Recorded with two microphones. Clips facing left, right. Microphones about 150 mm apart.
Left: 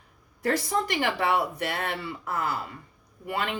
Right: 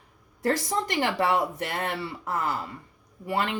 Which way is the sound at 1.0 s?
40° right (ahead or behind).